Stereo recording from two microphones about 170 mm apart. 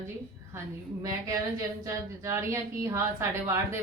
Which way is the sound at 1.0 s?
20° right (ahead or behind).